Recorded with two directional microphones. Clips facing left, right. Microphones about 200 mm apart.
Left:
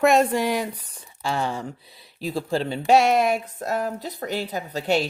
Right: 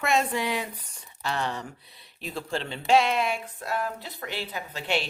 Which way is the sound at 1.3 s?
30° left (ahead or behind).